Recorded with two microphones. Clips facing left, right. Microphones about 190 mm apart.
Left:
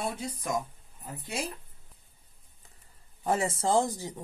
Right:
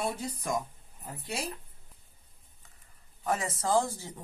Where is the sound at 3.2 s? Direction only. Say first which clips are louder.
Left 3 dB; 30° left (ahead or behind).